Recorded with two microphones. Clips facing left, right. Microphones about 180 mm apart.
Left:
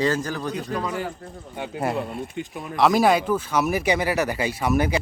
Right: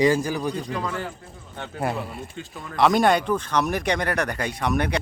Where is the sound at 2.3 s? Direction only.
20° left (ahead or behind).